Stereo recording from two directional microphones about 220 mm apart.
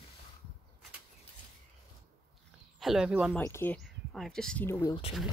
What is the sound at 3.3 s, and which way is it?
Speech, 10° left (ahead or behind).